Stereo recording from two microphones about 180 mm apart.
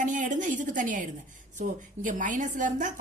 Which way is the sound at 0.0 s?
45° right (ahead or behind).